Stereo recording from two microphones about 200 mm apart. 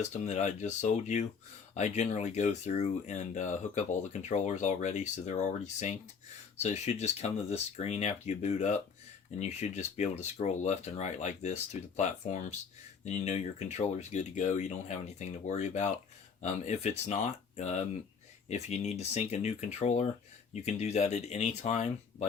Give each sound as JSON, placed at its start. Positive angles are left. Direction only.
{"t": 0.1, "sound": "speech", "side_deg": 35}